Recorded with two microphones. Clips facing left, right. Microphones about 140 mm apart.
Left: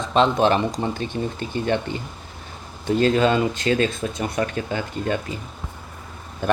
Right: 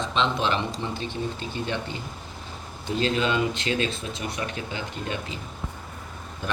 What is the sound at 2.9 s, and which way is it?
Speech, 50° left (ahead or behind).